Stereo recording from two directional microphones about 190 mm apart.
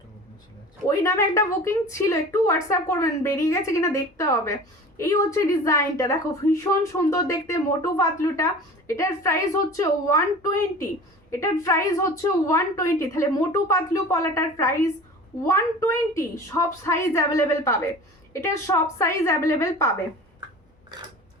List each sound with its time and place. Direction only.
0.9 s a woman's voice: 15° left (ahead or behind)